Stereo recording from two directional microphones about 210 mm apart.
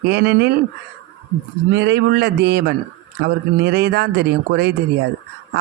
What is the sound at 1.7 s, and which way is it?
A man's voice, 55° right (ahead or behind).